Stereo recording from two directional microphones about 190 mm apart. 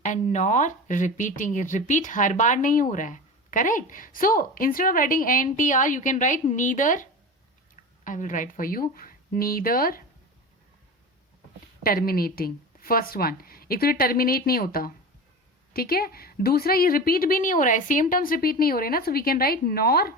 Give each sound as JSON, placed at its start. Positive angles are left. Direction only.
{"t": 0.0, "sound": "speech", "side_deg": 40}
{"t": 11.8, "sound": "speech", "side_deg": 50}